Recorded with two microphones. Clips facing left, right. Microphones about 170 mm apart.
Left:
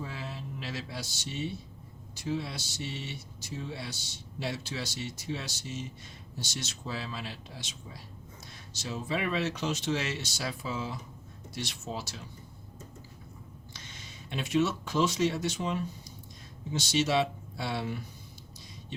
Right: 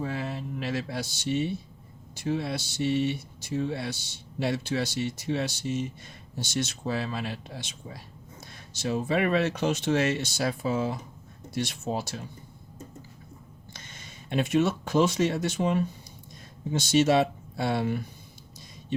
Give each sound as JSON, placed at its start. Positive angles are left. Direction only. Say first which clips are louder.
{"t": 0.0, "sound": "speech", "louder": "right 8 dB", "side_deg": -60}
{"t": 13.7, "sound": "speech", "louder": "right 3 dB", "side_deg": -50}